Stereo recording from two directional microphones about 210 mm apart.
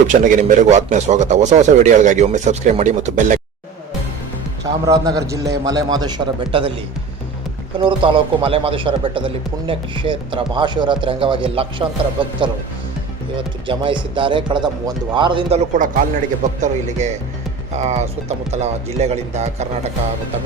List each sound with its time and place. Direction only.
0.1 s a man's voice: 35° right (ahead or behind)
4.6 s a man's voice: 15° right (ahead or behind)
7.8 s a man's voice: 25° right (ahead or behind)